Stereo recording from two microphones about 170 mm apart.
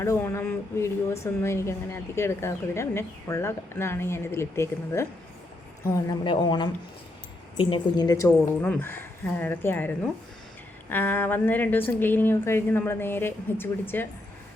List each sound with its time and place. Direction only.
0.0 s speech: 15° left (ahead or behind)